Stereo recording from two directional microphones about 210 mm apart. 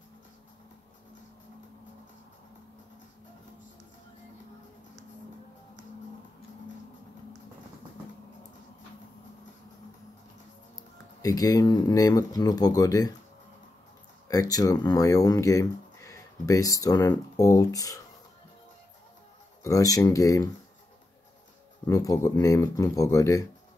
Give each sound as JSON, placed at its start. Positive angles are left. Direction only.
{"t": 11.2, "sound": "speech", "side_deg": 15}
{"t": 14.2, "sound": "speech", "side_deg": 15}
{"t": 19.6, "sound": "speech", "side_deg": 15}
{"t": 21.8, "sound": "speech", "side_deg": 15}